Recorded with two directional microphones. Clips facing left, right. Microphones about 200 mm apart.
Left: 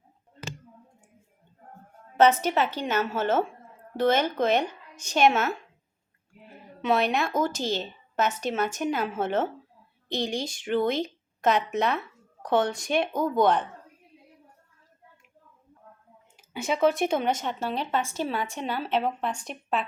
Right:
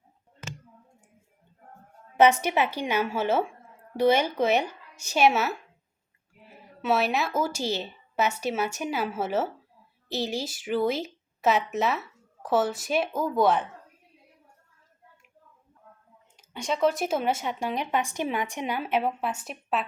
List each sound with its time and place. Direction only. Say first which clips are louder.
2.1 s a woman's voice: even; 10° right (ahead or behind)
16.4 s speech: left 1 dB; 5° left (ahead or behind)